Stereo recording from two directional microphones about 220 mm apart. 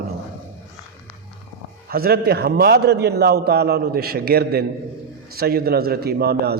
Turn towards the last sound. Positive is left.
turn(degrees=-45)  # may be behind; listen again after turning